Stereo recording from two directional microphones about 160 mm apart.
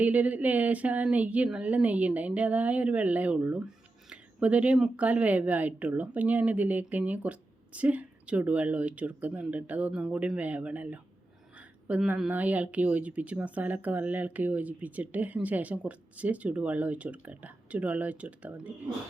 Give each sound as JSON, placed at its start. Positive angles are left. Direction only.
{"t": 0.0, "sound": "a woman's voice", "side_deg": -10}